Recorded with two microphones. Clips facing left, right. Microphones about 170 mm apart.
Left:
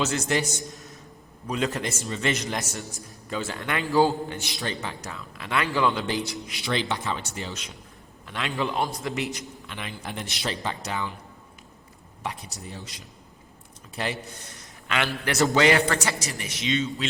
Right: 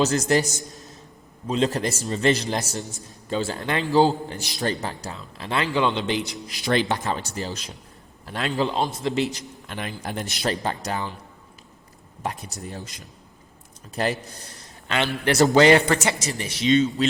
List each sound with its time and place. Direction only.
0.0 s a man's voice: 40° right (ahead or behind)
1.5 s a man's voice: 30° right (ahead or behind)
6.5 s a man's voice: 45° right (ahead or behind)
8.7 s a man's voice: 25° right (ahead or behind)
9.6 s a man's voice: 45° right (ahead or behind)
12.2 s a man's voice: 45° right (ahead or behind)